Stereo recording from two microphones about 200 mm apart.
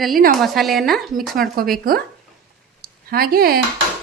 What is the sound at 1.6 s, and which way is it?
Speech, 45° right (ahead or behind).